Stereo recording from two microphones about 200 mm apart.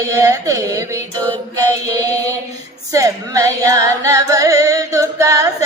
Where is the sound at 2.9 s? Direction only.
15° right (ahead or behind).